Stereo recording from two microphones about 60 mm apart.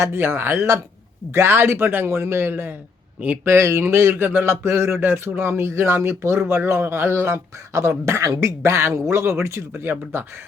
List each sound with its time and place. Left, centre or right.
0.0 s a man's voice: right